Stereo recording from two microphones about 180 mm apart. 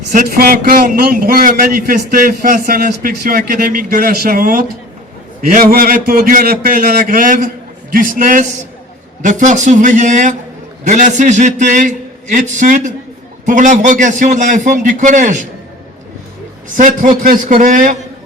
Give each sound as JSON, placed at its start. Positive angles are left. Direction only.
{"t": 0.1, "sound": "a man's voice", "side_deg": -50}
{"t": 16.7, "sound": "a man's voice", "side_deg": -45}